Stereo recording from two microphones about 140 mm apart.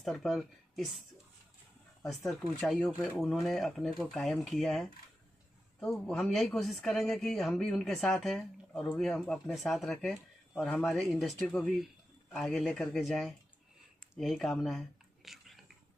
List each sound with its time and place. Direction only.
0.0 s a woman's voice: centre (ahead or behind)
2.0 s a man's voice: centre (ahead or behind)
13.9 s a sound: centre (ahead or behind)